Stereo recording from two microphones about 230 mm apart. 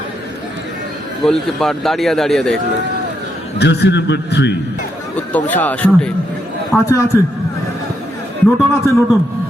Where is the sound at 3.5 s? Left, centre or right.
Left.